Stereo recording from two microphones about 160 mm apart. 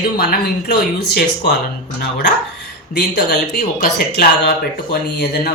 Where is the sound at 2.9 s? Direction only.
80° left.